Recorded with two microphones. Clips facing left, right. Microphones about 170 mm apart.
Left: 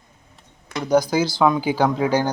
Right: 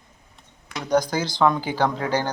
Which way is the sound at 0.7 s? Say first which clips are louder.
Left 4 dB; 5° left (ahead or behind).